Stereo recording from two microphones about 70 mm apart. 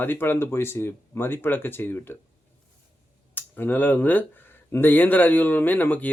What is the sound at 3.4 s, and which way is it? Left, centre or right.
A man's voice, left.